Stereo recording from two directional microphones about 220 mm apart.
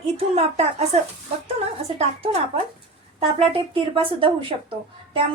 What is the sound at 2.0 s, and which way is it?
A woman's voice, 30° right (ahead or behind).